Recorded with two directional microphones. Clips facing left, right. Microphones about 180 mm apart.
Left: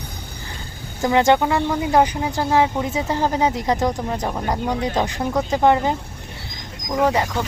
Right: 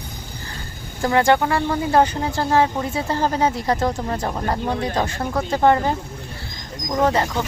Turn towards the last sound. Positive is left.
turn(degrees=15)  # may be behind; listen again after turning